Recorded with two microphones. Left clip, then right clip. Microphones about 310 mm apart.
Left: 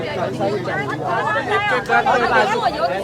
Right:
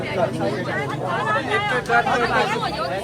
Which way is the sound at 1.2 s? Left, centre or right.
Left.